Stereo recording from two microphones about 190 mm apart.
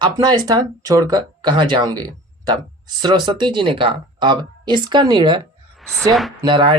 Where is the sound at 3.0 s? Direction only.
25° right (ahead or behind).